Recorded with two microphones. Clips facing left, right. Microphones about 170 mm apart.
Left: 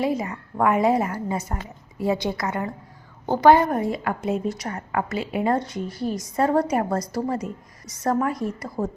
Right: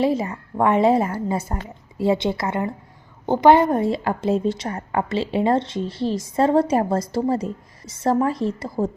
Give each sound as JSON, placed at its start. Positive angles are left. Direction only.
{"t": 0.0, "sound": "a woman's voice", "side_deg": -30}